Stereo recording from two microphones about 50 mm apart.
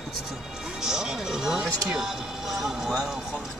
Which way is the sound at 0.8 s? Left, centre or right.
Centre.